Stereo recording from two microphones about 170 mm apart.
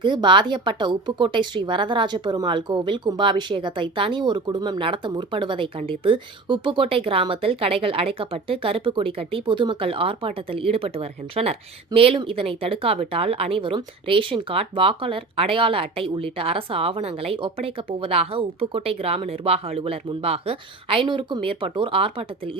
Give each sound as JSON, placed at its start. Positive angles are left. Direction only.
{"t": 0.0, "sound": "a woman's voice", "side_deg": -25}